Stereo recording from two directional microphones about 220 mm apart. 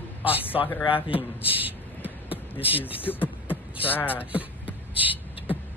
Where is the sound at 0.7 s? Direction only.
15° left (ahead or behind).